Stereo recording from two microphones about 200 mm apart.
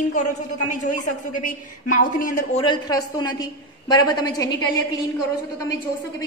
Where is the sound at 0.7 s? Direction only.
40° left (ahead or behind).